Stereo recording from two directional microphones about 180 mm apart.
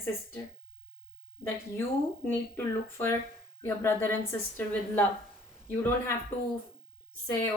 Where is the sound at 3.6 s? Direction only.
15° left (ahead or behind).